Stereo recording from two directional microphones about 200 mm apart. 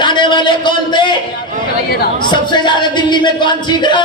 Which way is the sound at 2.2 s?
25° left (ahead or behind).